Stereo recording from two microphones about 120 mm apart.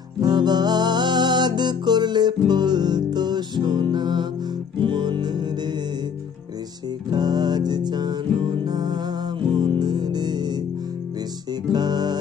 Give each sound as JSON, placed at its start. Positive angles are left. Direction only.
{"t": 0.2, "sound": "music", "side_deg": -35}
{"t": 7.1, "sound": "music", "side_deg": -35}
{"t": 11.7, "sound": "music", "side_deg": -35}